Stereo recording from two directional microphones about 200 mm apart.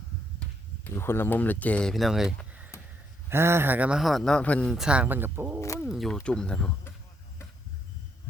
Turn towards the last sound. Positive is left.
turn(degrees=5)  # may be behind; listen again after turning